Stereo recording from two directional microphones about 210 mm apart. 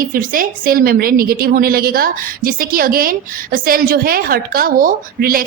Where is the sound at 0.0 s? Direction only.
40° right (ahead or behind).